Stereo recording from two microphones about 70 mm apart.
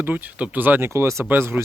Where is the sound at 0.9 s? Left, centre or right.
Right.